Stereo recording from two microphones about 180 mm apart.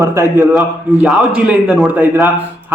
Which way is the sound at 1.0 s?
5° right (ahead or behind).